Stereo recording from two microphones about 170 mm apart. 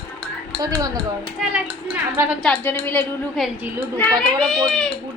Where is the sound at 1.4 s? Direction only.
10° right (ahead or behind).